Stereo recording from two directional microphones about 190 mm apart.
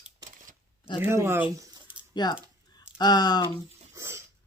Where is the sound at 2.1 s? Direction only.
20° left (ahead or behind).